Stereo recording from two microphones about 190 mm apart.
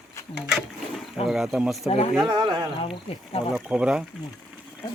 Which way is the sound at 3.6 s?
5° right (ahead or behind).